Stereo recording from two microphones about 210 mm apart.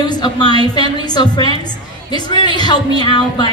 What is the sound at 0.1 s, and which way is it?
Speech, 20° left (ahead or behind).